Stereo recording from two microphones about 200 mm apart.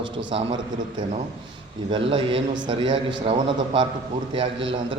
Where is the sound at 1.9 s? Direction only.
25° right (ahead or behind).